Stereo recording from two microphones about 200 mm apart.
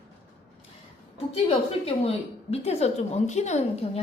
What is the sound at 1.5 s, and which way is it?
A woman's voice, 30° left (ahead or behind).